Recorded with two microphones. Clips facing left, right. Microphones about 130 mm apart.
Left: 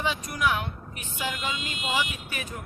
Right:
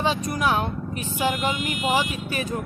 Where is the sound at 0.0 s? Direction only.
35° right (ahead or behind).